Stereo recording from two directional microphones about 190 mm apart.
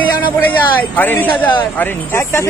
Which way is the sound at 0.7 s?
10° left (ahead or behind).